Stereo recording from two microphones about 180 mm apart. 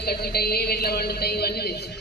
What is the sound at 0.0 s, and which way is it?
A woman's voice, 60° left (ahead or behind).